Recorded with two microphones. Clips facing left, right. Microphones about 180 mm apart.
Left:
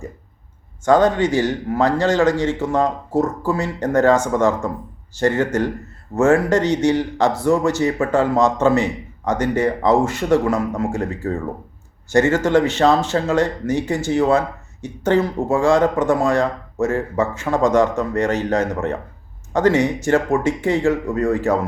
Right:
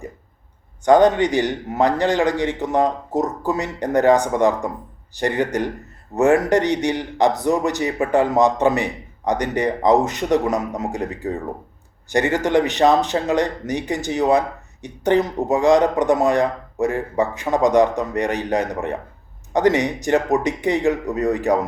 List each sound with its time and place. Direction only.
0.9 s speech: 15° right (ahead or behind)